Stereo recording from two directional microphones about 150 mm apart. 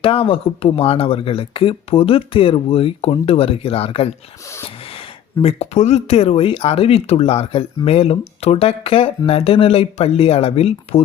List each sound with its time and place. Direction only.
0.0 s speech: 40° left (ahead or behind)